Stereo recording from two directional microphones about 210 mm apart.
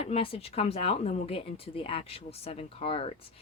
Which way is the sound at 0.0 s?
25° left (ahead or behind).